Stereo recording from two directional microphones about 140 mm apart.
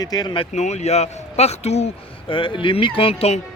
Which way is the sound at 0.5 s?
55° left (ahead or behind).